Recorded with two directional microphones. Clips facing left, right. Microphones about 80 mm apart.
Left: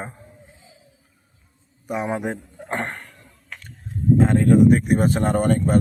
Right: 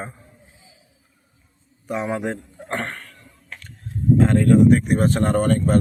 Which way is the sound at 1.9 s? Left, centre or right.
Centre.